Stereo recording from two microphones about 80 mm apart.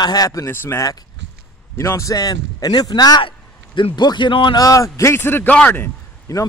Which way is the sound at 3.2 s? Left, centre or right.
Left.